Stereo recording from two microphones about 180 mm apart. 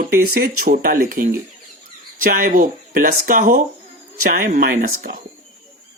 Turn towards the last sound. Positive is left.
turn(degrees=-50)  # may be behind; listen again after turning